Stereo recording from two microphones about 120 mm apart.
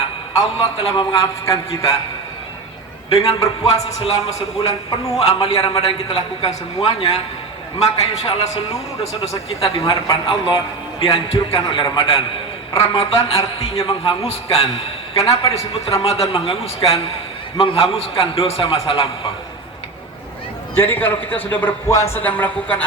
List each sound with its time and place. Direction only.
0.3 s a man's voice: 55° left (ahead or behind)
3.1 s a man's voice: 55° left (ahead or behind)
20.7 s a man's voice: 15° left (ahead or behind)
21.8 s a man's voice: 25° left (ahead or behind)